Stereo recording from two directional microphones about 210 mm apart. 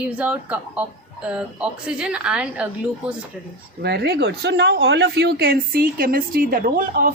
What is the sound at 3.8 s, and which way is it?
Speech, 50° right (ahead or behind).